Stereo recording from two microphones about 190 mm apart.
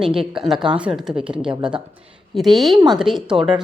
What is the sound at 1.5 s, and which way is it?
Speech, 25° right (ahead or behind).